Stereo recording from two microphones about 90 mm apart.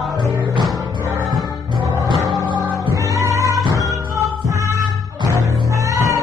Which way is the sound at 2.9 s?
35° right (ahead or behind).